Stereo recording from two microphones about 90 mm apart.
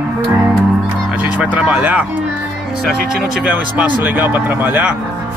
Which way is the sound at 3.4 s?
15° right (ahead or behind).